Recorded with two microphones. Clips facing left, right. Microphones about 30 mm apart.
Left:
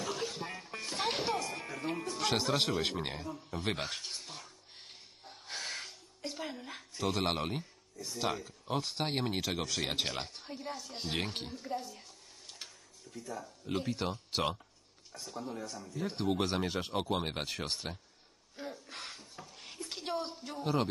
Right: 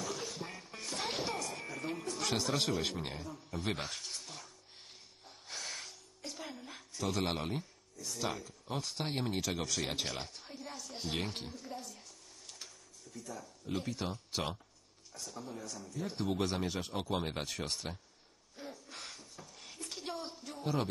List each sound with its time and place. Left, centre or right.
0.0 s a sound: left
1.0 s music: left
2.0 s speech: left
3.4 s speech: left
3.8 s gasp: left
7.4 s speech: left
12.4 s a sound: left
15.1 s speech: left
18.6 s a sound: left